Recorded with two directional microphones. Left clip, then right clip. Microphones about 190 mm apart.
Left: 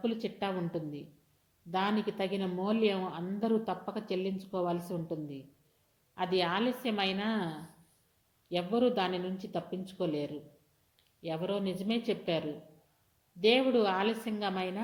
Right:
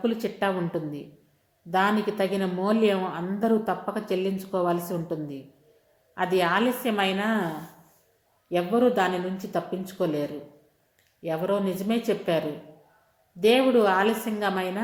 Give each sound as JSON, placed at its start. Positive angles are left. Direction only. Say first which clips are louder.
{"t": 0.0, "sound": "a woman's voice", "louder": "right 8 dB", "side_deg": 15}
{"t": 8.4, "sound": "speech", "louder": "right 7 dB", "side_deg": 25}
{"t": 13.4, "sound": "speech", "louder": "right 7 dB", "side_deg": 25}